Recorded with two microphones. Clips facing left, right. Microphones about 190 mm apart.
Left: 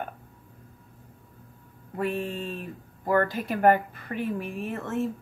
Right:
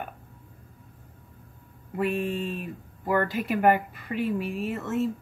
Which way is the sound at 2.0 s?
15° right (ahead or behind).